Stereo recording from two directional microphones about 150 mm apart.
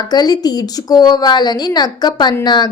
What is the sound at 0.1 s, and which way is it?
A woman's voice, 25° left (ahead or behind).